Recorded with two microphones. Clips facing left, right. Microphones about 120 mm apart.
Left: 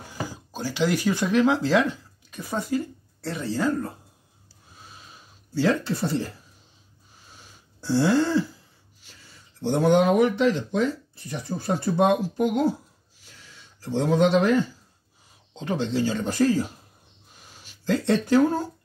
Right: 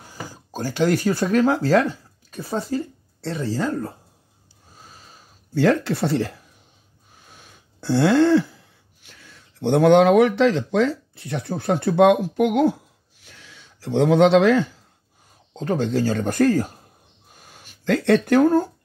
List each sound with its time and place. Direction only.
0.5 s speech: 50° right (ahead or behind); by 3.9 s 30° right (ahead or behind)
5.5 s speech: 60° right (ahead or behind)
7.2 s throat clearing: 60° right (ahead or behind)
13.2 s a sound: 70° right (ahead or behind); by 14.7 s 90° right
15.5 s speech: 45° right (ahead or behind)
17.4 s a sound: 50° right (ahead or behind)